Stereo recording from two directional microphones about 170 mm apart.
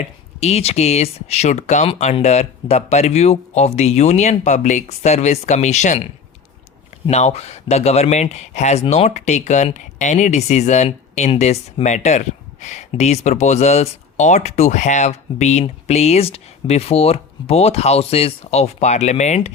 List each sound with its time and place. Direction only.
0.3 s speech: 40° left (ahead or behind)
7.1 s speech: 40° left (ahead or behind)